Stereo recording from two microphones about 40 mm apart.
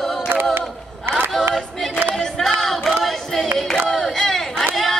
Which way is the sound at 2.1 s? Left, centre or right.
Centre.